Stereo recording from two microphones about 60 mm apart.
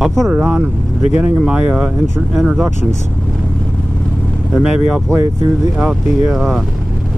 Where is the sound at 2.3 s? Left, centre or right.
Centre.